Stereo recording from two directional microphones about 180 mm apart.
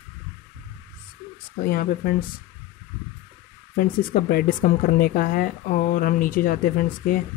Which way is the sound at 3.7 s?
55° left (ahead or behind).